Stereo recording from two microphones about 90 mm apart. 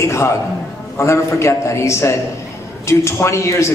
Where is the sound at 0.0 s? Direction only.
35° left (ahead or behind).